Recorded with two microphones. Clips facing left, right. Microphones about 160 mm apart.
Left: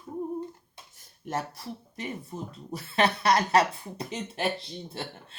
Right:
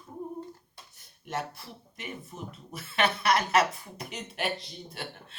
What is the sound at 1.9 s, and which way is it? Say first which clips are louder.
Speech: left 4 dB; 35° left (ahead or behind).